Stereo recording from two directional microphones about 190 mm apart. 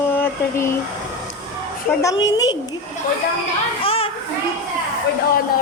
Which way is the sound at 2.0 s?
15° left (ahead or behind).